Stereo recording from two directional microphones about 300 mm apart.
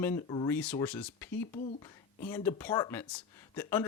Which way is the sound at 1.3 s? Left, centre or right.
Left.